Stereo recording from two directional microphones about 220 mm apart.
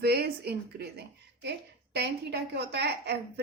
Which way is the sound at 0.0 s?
45° right (ahead or behind).